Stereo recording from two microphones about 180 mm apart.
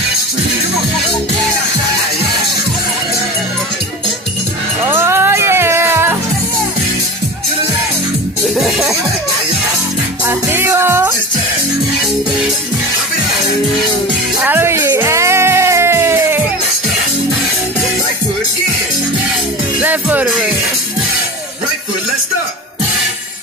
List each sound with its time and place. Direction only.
4.8 s music: 15° right (ahead or behind)
8.5 s music: centre (ahead or behind)
10.2 s music: 15° right (ahead or behind)
14.4 s music: 10° right (ahead or behind)
19.8 s music: 10° right (ahead or behind)